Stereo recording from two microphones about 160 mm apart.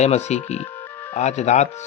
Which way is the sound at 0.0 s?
45° left (ahead or behind).